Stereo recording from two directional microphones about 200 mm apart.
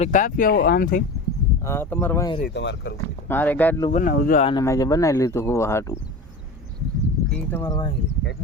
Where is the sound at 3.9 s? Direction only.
40° left (ahead or behind).